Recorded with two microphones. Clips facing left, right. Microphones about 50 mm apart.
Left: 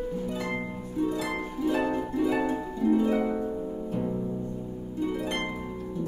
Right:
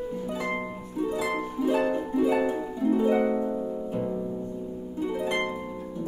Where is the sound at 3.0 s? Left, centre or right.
Centre.